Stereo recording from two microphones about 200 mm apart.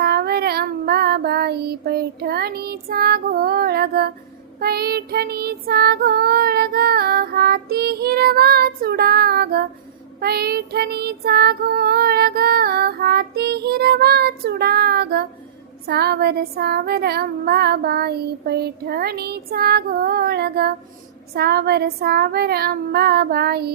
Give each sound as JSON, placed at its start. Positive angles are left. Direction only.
{"t": 0.0, "sound": "child singing", "side_deg": -50}